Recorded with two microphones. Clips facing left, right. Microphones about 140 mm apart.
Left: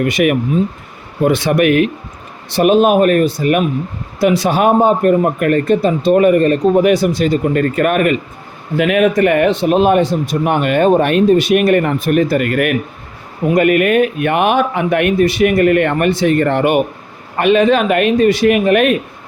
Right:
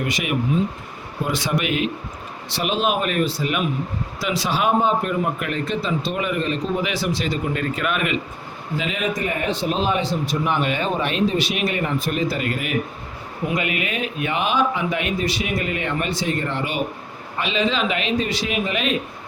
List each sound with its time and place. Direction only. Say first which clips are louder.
0.0 s a man's voice: left 10 dB; 60° left (ahead or behind)
8.7 s a man's voice: left 13 dB; 65° left (ahead or behind)
13.5 s a man's voice: left 14 dB; 50° left (ahead or behind)